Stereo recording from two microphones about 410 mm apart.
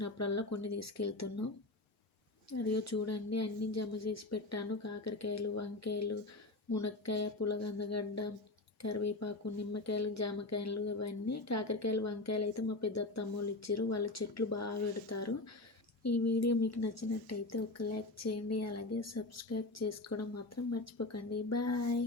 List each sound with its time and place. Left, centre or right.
0.0 s speech: left
2.5 s speech: left